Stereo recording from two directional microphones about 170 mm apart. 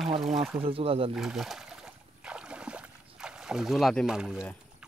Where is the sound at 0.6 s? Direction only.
35° right (ahead or behind).